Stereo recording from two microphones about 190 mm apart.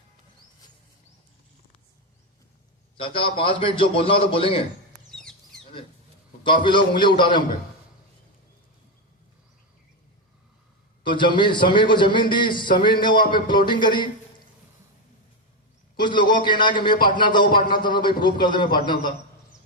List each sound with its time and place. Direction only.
3.0 s a man's voice: 25° left (ahead or behind)
5.1 s chicken: 5° left (ahead or behind)
6.4 s a man's voice: 25° left (ahead or behind)
11.0 s a man's voice: 25° left (ahead or behind)
16.0 s a man's voice: 25° left (ahead or behind)